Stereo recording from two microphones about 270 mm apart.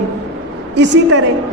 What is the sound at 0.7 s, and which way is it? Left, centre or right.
Speech, right.